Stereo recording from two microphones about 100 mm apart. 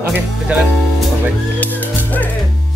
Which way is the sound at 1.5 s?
15° left (ahead or behind).